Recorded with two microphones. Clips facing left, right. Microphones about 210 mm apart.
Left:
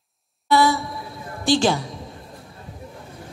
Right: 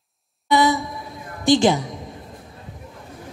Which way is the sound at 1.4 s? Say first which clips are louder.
Right 3 dB; 20° right (ahead or behind).